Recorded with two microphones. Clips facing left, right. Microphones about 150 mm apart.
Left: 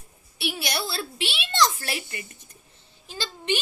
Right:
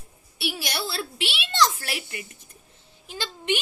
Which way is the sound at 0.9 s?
5° right (ahead or behind).